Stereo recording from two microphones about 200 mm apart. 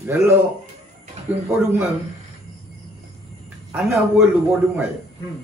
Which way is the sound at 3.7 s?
10° right (ahead or behind).